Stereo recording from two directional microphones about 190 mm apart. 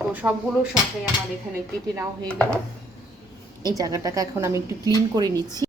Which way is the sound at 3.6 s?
20° right (ahead or behind).